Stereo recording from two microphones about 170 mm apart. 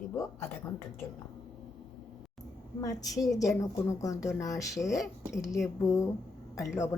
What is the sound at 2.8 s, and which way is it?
A woman's voice, 20° left (ahead or behind).